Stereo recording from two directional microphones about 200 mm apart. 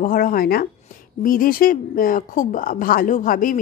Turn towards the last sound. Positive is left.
turn(degrees=45)  # may be behind; listen again after turning